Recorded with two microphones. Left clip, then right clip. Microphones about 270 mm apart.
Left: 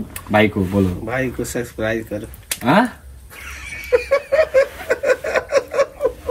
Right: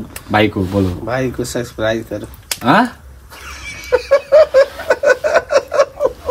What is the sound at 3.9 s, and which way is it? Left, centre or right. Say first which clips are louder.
Snicker: right 6 dB; right.